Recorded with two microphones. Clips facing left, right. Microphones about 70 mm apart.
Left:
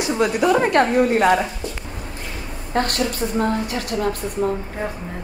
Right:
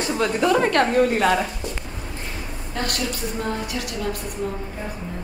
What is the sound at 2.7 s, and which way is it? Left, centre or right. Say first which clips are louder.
A woman's voice: left 6 dB; left.